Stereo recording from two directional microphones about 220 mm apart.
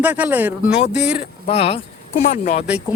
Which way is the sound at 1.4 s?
30° left (ahead or behind).